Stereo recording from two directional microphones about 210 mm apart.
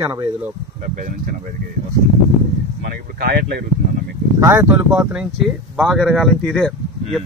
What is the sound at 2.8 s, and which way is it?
Speech, 45° right (ahead or behind).